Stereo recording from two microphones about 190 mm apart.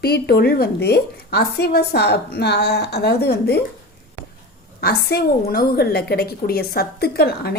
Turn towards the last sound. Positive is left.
turn(degrees=55)  # may be behind; listen again after turning